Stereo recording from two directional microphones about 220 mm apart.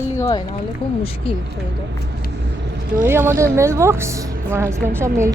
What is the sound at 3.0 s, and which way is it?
A woman's voice, 10° right (ahead or behind).